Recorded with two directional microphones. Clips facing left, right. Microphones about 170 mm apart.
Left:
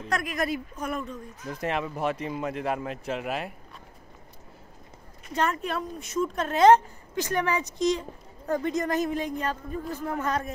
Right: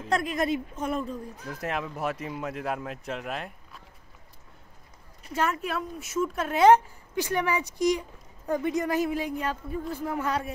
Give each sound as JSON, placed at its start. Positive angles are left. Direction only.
{"t": 0.1, "sound": "speech", "side_deg": -25}
{"t": 1.5, "sound": "speech", "side_deg": 0}
{"t": 5.3, "sound": "a woman's voice", "side_deg": -5}